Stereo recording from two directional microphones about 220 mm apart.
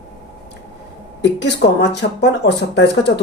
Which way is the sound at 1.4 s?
50° left (ahead or behind).